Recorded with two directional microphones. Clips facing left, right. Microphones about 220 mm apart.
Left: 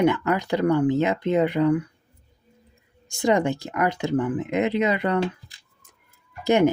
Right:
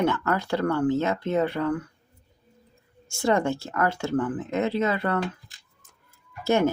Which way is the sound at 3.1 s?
15° left (ahead or behind).